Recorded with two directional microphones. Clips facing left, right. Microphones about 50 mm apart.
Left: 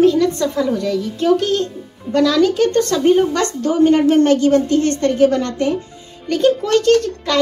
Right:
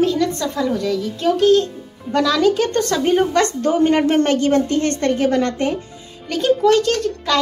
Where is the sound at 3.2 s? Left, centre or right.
Right.